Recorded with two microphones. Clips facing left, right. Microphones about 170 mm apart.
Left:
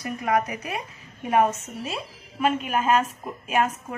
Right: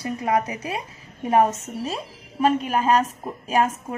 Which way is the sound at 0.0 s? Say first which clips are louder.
Right 1 dB; 30° right (ahead or behind).